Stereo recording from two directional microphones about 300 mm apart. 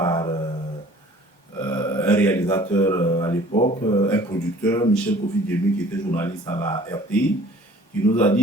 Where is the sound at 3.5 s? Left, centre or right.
Left.